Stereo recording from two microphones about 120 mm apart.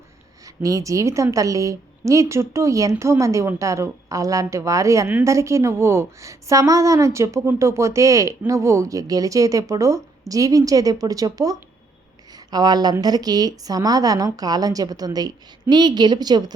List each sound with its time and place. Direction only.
0.4 s a woman's voice: 30° right (ahead or behind)